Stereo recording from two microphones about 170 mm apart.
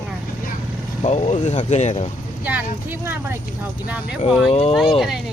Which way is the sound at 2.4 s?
10° right (ahead or behind).